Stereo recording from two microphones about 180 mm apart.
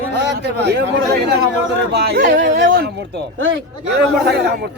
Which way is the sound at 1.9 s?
65° right (ahead or behind).